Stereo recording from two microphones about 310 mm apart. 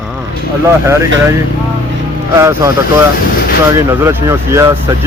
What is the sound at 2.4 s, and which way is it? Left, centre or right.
Speech, centre.